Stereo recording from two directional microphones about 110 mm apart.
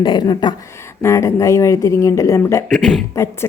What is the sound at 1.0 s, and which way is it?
A woman's voice, 25° left (ahead or behind).